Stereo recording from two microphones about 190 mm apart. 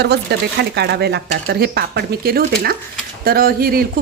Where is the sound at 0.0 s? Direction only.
60° right (ahead or behind).